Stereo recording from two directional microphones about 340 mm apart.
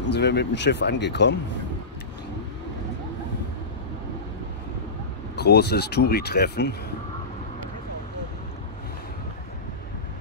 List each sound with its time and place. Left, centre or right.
0.1 s speech: left
5.3 s speech: left